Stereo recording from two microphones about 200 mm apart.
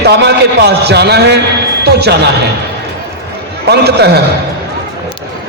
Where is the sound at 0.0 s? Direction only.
55° right (ahead or behind).